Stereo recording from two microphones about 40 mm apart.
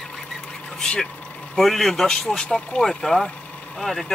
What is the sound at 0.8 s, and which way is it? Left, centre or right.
Speech, centre.